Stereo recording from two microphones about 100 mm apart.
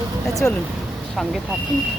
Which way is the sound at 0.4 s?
20° left (ahead or behind).